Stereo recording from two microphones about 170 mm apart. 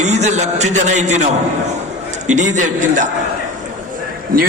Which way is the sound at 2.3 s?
45° right (ahead or behind).